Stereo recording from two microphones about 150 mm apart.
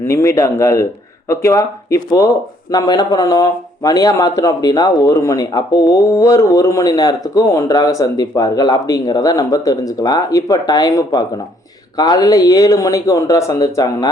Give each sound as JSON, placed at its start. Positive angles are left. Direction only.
{"t": 0.1, "sound": "speech", "side_deg": 20}